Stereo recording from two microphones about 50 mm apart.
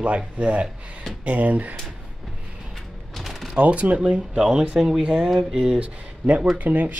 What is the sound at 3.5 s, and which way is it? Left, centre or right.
Speech, right.